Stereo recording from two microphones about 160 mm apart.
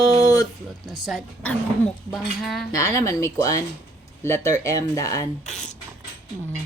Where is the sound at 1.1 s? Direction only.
Centre (ahead or behind).